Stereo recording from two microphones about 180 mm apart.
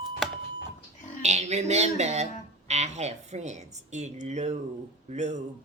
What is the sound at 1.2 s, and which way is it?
Speech, 40° right (ahead or behind).